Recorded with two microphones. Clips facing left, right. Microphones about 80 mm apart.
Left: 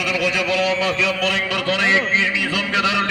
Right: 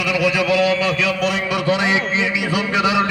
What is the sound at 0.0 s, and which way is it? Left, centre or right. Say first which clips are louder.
Speech: right 3 dB; centre.